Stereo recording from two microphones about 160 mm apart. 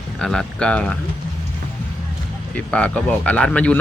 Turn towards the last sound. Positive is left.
turn(degrees=10)  # may be behind; listen again after turning